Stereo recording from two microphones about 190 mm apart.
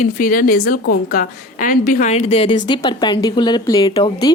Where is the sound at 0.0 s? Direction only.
45° left (ahead or behind).